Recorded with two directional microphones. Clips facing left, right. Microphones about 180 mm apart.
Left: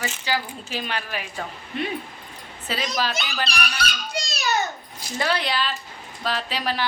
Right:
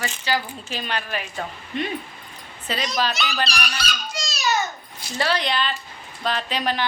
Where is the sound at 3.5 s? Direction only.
60° left (ahead or behind).